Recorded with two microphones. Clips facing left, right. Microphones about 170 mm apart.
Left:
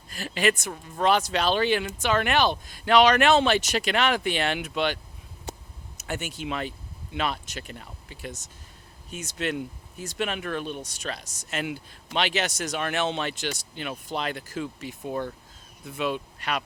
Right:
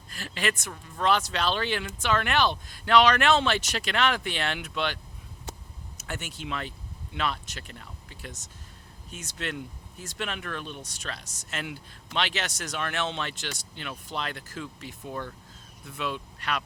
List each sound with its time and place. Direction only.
0.1 s a woman's voice: 10° left (ahead or behind)
0.5 s speech: 25° left (ahead or behind)
1.3 s speech: 10° left (ahead or behind)
6.1 s speech: 5° left (ahead or behind)
10.2 s speech: 10° left (ahead or behind)